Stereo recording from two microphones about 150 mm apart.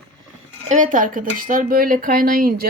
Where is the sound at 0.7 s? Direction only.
55° right (ahead or behind); by 2.7 s 75° right (ahead or behind).